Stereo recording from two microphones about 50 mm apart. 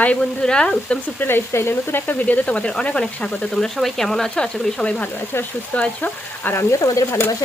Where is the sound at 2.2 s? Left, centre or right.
Left.